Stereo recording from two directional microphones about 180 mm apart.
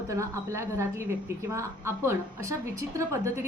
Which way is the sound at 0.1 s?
15° right (ahead or behind).